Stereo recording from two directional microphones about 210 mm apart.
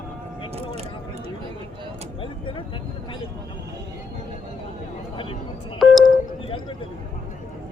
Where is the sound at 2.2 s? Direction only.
25° left (ahead or behind).